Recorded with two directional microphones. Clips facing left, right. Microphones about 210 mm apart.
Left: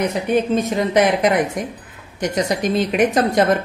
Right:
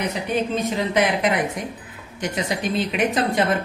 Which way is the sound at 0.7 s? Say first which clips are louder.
Left 4 dB; 45° left (ahead or behind).